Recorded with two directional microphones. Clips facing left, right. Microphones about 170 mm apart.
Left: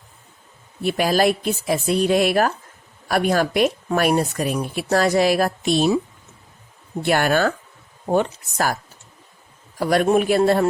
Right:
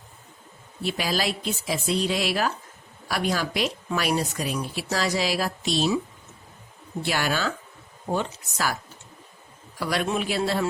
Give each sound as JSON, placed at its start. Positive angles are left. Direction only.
{"t": 0.8, "sound": "speech", "side_deg": 55}
{"t": 7.0, "sound": "speech", "side_deg": 55}